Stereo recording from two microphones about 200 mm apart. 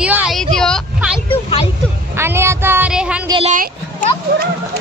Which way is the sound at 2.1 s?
10° right (ahead or behind).